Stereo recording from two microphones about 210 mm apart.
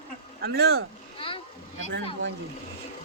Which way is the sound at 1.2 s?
25° left (ahead or behind).